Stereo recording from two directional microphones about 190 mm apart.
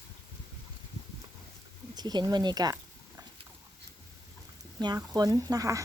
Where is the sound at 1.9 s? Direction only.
20° right (ahead or behind).